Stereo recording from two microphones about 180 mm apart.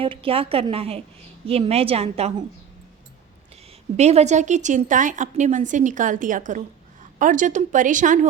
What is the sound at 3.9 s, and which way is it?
A woman's voice, 35° right (ahead or behind).